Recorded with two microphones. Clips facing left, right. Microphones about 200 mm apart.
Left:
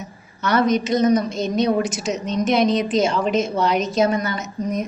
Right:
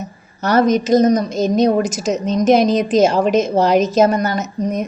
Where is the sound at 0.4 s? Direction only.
40° right (ahead or behind).